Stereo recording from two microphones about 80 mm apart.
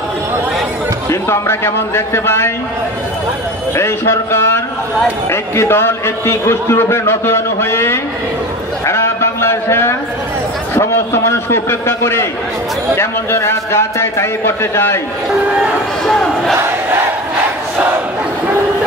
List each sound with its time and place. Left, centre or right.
1.3 s a man's voice: left
3.7 s a man's voice: left
16.1 s crowd: centre